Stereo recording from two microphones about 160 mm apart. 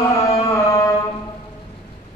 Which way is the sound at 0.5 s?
20° left (ahead or behind).